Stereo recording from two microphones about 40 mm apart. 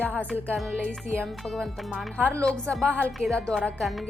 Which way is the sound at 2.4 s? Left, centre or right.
Left.